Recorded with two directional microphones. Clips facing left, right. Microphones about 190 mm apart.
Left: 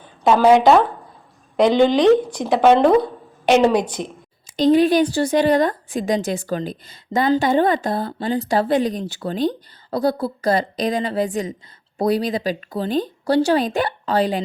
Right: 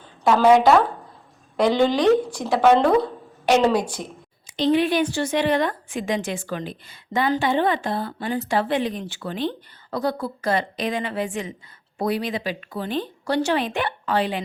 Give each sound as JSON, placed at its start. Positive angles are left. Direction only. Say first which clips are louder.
{"t": 0.0, "sound": "speech", "louder": "left 3 dB", "side_deg": 15}
{"t": 4.4, "sound": "a woman's voice", "louder": "left 5 dB", "side_deg": 40}